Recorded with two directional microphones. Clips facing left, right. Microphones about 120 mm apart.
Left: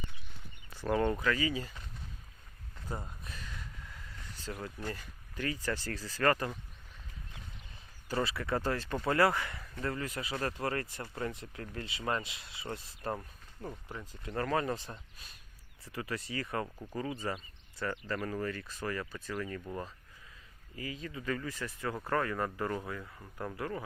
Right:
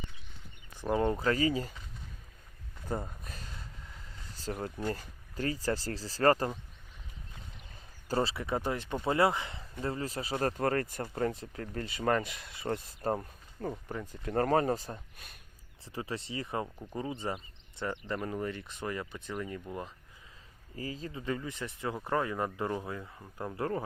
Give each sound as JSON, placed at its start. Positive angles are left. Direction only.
{"t": 0.7, "sound": "speech", "side_deg": -15}
{"t": 3.0, "sound": "a sound", "side_deg": -35}
{"t": 4.9, "sound": "speech", "side_deg": -35}
{"t": 8.0, "sound": "speech", "side_deg": -35}
{"t": 13.1, "sound": "speech", "side_deg": -30}
{"t": 14.0, "sound": "speech", "side_deg": -50}
{"t": 14.9, "sound": "speech", "side_deg": -55}
{"t": 15.8, "sound": "speech", "side_deg": -25}
{"t": 20.7, "sound": "speech", "side_deg": -35}
{"t": 23.6, "sound": "speech", "side_deg": -35}